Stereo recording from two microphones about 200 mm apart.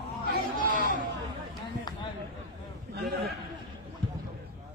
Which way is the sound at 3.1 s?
50° right (ahead or behind).